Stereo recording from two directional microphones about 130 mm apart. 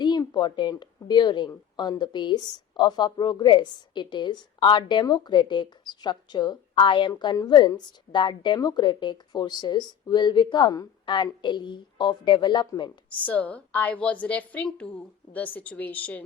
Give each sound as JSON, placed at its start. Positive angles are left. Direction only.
{"t": 0.0, "sound": "a woman's voice", "side_deg": 35}
{"t": 13.1, "sound": "a woman's voice", "side_deg": 10}